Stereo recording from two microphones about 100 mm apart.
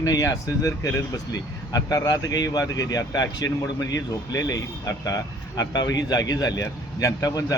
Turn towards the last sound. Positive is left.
turn(degrees=35)  # may be behind; listen again after turning